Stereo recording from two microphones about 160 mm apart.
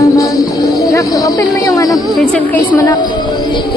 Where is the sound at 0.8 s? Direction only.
20° left (ahead or behind).